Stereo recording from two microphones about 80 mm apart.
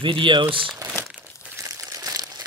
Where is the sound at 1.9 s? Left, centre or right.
Right.